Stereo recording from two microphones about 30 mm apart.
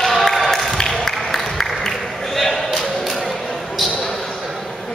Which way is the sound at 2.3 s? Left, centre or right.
Centre.